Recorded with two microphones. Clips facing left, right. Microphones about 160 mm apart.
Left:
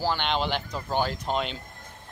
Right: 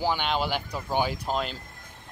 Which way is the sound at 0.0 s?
10° right (ahead or behind).